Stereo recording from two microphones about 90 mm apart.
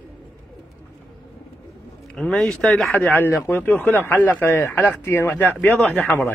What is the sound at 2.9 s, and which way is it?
Speech, 15° left (ahead or behind).